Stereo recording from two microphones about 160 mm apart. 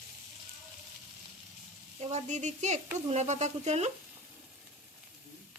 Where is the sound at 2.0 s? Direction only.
45° right (ahead or behind).